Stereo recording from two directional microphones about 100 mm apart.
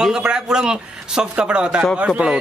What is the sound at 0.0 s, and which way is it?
A man's voice, 10° right (ahead or behind).